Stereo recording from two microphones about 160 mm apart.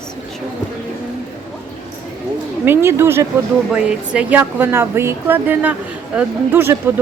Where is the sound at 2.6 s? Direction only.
15° right (ahead or behind).